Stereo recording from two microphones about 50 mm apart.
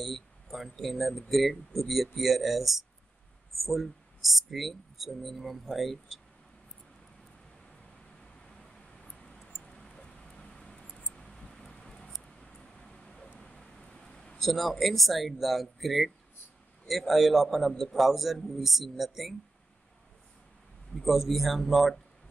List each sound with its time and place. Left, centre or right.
0.0 s speech: centre
8.2 s a sound: centre
9.6 s mouse: centre
11.1 s a sound: centre
13.4 s vehicle: centre
14.4 s speech: centre
20.9 s speech: centre